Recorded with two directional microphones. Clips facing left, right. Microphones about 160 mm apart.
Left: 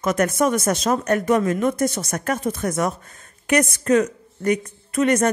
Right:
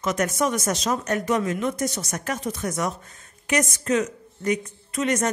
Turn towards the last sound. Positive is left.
turn(degrees=55)  # may be behind; listen again after turning